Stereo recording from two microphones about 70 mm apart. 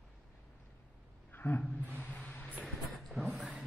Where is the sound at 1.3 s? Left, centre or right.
Left.